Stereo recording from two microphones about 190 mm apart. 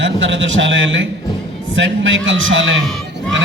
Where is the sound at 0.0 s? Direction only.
75° right (ahead or behind).